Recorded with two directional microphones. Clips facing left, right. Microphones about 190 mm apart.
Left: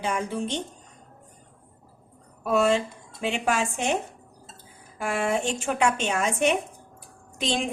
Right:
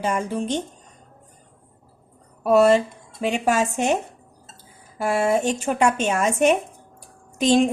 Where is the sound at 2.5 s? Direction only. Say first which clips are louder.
Right 6 dB; 40° right (ahead or behind).